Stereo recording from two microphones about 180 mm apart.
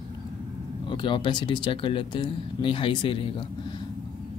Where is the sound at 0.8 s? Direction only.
25° left (ahead or behind).